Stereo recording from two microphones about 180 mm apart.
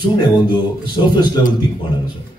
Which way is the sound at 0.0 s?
25° left (ahead or behind).